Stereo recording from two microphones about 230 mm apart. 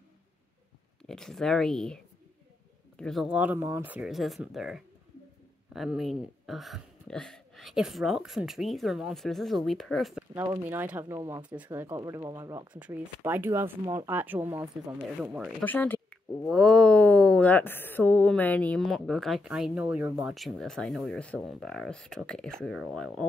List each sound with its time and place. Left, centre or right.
1.0 s speech: centre
3.0 s speech: centre
15.6 s speech: centre